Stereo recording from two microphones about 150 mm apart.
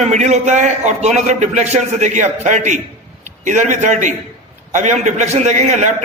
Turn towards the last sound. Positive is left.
turn(degrees=-50)  # may be behind; listen again after turning